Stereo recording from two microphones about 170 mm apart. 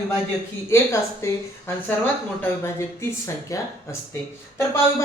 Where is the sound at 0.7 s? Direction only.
15° left (ahead or behind).